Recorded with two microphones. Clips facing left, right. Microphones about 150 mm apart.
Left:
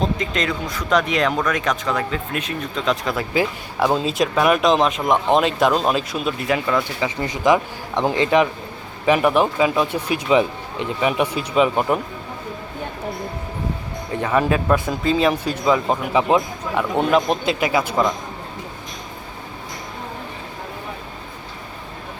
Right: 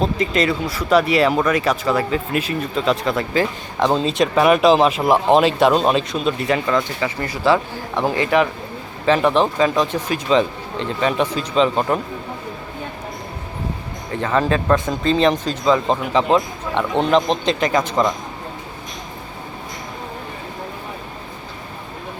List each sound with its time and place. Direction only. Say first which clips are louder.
0.0 s speech: right 3 dB; 5° right (ahead or behind)
7.0 s speech: even; 15° left (ahead or behind)
14.2 s speech: even; 10° left (ahead or behind)